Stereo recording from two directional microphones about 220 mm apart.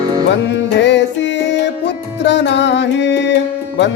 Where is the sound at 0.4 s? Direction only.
55° left (ahead or behind).